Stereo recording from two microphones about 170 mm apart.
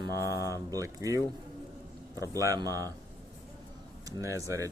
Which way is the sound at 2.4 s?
20° right (ahead or behind).